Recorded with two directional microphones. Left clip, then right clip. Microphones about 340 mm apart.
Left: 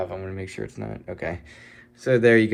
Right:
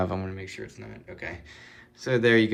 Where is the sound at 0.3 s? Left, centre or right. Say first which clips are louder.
Left 4 dB; centre.